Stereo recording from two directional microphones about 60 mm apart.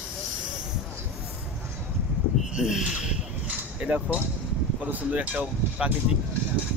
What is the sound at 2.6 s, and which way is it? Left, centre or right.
Speech, centre.